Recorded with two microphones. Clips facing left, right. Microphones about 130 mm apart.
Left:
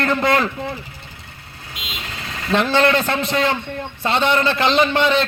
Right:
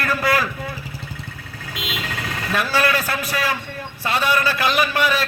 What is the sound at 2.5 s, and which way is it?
A man's voice, 25° left (ahead or behind).